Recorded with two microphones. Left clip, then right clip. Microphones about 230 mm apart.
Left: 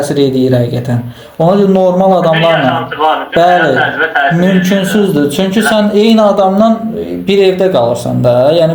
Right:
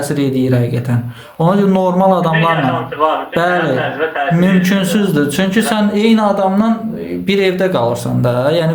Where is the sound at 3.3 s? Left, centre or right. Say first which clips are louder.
Left 7 dB; centre.